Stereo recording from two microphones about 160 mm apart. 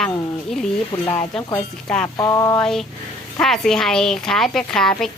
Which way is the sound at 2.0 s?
20° left (ahead or behind).